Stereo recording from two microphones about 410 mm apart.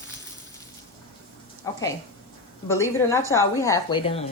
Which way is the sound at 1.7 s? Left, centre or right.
Centre.